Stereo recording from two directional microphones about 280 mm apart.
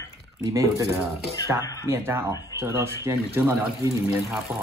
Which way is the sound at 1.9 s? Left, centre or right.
Centre.